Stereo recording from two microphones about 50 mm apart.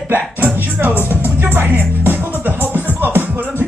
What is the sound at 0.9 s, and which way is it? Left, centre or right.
Speech, left.